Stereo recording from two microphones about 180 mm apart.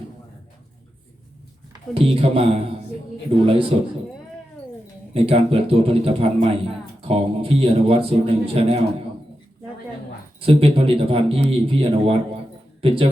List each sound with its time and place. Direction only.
1.9 s a man's voice: 30° right (ahead or behind)
5.1 s a man's voice: 30° right (ahead or behind)
10.4 s a man's voice: 30° right (ahead or behind)